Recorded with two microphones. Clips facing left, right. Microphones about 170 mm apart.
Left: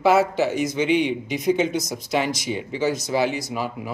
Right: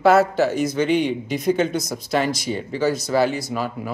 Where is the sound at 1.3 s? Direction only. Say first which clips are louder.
Even; 15° left (ahead or behind).